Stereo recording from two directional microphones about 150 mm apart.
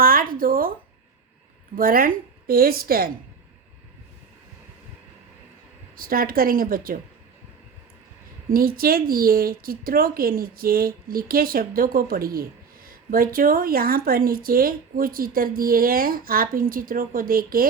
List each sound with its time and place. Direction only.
0.0 s a sound: 70° right (ahead or behind)
1.7 s speech: 75° right (ahead or behind)
6.0 s speech: 75° right (ahead or behind)
8.4 s speech: 75° right (ahead or behind)